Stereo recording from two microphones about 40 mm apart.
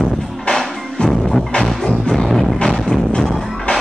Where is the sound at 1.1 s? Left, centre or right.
Centre.